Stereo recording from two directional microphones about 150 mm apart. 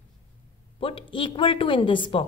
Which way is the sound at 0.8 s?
35° left (ahead or behind).